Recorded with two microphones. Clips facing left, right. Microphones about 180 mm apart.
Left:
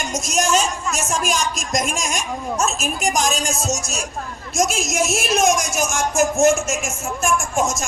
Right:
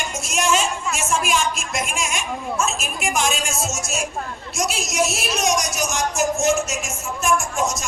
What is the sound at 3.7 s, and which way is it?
A man's voice, 40° left (ahead or behind).